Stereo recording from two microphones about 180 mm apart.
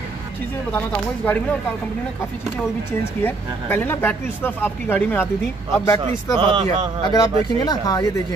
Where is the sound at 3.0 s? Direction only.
10° left (ahead or behind).